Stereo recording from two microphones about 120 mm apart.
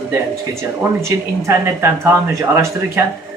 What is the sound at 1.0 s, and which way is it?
Speech, 20° right (ahead or behind).